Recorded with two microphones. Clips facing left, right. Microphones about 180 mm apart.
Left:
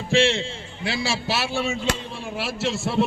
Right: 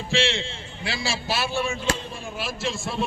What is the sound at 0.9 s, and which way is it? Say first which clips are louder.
A man's voice: left 3 dB; 70° left (ahead or behind).